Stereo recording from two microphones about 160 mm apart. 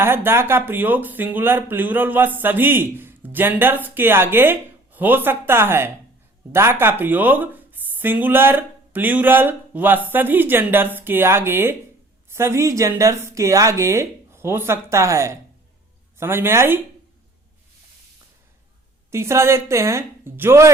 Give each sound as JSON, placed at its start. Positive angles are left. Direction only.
{"t": 0.0, "sound": "speech", "side_deg": -15}
{"t": 19.1, "sound": "speech", "side_deg": -15}